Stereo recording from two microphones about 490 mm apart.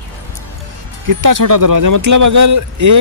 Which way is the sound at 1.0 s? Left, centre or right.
Right.